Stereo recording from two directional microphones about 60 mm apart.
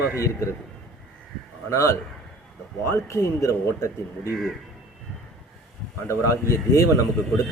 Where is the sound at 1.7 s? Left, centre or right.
Left.